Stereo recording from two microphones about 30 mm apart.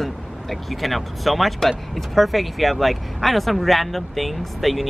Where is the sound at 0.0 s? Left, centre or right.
Centre.